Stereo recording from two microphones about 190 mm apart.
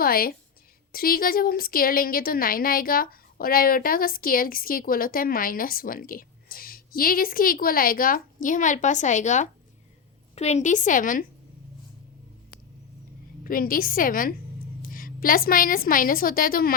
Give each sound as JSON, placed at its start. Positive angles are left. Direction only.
{"t": 0.0, "sound": "a woman's voice", "side_deg": 50}
{"t": 13.4, "sound": "a woman's voice", "side_deg": 50}